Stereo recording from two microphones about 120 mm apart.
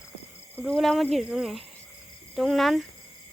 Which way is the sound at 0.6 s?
Centre (ahead or behind).